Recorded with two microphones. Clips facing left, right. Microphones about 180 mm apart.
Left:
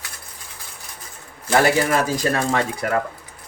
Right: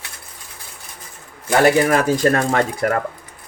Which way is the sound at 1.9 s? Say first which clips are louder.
Right 4 dB; 55° right (ahead or behind).